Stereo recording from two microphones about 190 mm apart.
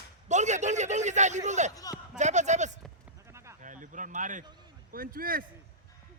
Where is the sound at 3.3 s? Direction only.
15° right (ahead or behind).